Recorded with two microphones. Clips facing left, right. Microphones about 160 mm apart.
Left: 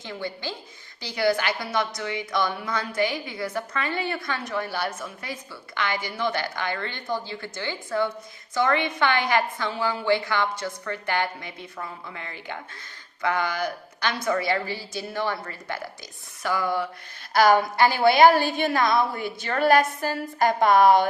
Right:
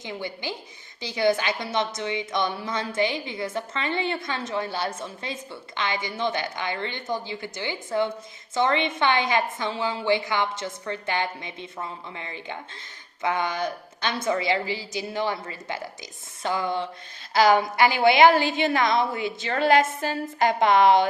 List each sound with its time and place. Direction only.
0.0 s a woman's voice: 20° right (ahead or behind)
18.5 s a woman's voice: 50° left (ahead or behind)
18.8 s a woman's voice: 20° right (ahead or behind)
19.1 s a woman's voice: 50° left (ahead or behind)
19.7 s a woman's voice: 20° right (ahead or behind)
20.4 s a woman's voice: 45° left (ahead or behind)